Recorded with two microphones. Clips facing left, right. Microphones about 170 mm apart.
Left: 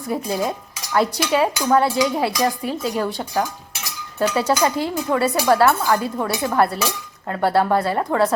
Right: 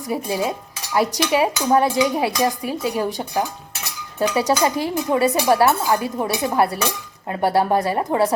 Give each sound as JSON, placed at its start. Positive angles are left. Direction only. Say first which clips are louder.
{"t": 0.1, "sound": "speech", "louder": "even", "side_deg": -10}